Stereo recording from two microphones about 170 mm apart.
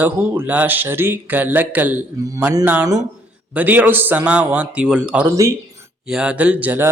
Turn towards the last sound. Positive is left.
turn(degrees=-10)  # may be behind; listen again after turning